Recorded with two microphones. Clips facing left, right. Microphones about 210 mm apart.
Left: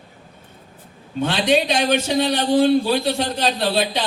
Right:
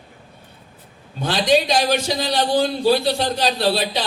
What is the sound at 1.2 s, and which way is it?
Speech, 35° right (ahead or behind).